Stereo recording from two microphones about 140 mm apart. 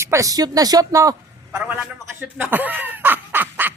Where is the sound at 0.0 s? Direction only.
20° right (ahead or behind).